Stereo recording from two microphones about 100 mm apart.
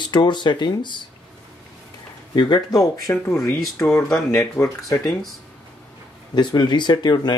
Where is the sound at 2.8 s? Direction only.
25° left (ahead or behind).